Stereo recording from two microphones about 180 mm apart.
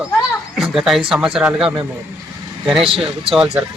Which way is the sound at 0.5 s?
Centre (ahead or behind).